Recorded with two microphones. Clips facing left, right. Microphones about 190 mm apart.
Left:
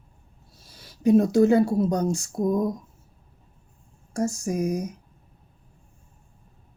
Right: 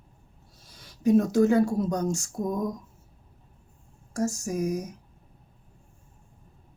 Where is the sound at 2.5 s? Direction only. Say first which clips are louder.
Left 5 dB; 35° left (ahead or behind).